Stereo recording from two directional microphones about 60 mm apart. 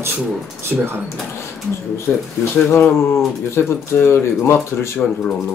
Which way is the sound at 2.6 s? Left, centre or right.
Left.